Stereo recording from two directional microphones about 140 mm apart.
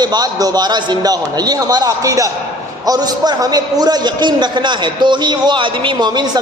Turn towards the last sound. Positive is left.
turn(degrees=-30)  # may be behind; listen again after turning